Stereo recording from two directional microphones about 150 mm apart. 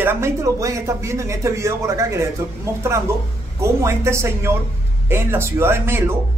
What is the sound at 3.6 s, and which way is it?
Speech, 20° right (ahead or behind).